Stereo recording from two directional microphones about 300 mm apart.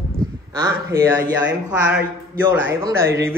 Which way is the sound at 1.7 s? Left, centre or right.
Centre.